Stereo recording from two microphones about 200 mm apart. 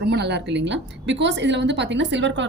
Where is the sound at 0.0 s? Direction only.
60° right (ahead or behind).